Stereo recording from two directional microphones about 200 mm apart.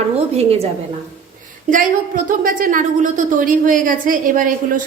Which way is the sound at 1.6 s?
40° right (ahead or behind).